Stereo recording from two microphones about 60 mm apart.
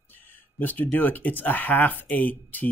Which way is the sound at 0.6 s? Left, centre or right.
Left.